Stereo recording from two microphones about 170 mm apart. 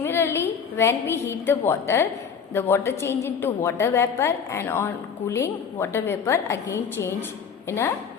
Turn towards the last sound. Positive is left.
turn(degrees=15)  # may be behind; listen again after turning